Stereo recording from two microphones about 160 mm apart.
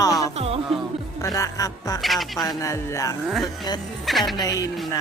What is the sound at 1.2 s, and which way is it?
Speech, 20° left (ahead or behind).